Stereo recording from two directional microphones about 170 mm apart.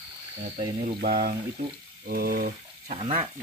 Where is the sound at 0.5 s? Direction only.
55° right (ahead or behind).